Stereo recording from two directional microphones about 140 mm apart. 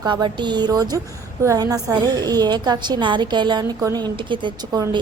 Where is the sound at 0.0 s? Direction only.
30° right (ahead or behind).